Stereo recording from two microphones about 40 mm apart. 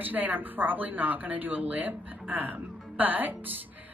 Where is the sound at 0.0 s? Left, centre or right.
Right.